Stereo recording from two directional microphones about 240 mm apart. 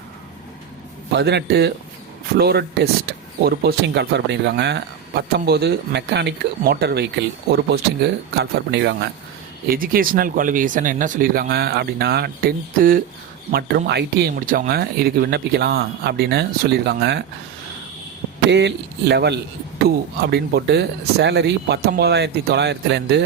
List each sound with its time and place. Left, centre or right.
1.1 s speech: right
18.5 s speech: right